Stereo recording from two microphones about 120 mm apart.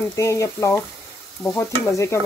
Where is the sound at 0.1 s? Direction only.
25° left (ahead or behind).